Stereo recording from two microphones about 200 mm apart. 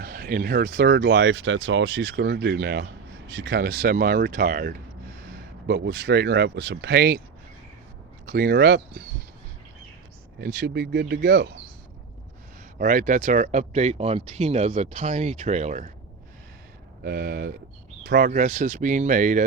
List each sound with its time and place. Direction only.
0.0 s speech: 45° right (ahead or behind)
8.3 s speech: 50° right (ahead or behind)
10.4 s speech: 55° right (ahead or behind)
12.8 s speech: 40° right (ahead or behind)
17.0 s speech: 50° right (ahead or behind)